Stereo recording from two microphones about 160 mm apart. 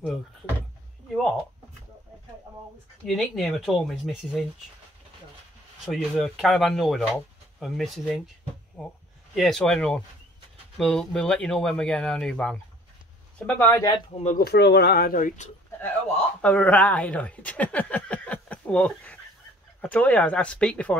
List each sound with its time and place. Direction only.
3.1 s speech: centre (ahead or behind)
5.9 s speech: centre (ahead or behind)
9.3 s speech: centre (ahead or behind); by 14.0 s 20° left (ahead or behind)
14.4 s speech: 90° left; by 15.5 s 50° left (ahead or behind)
15.8 s a sound: 10° left (ahead or behind)
19.8 s speech: 10° left (ahead or behind)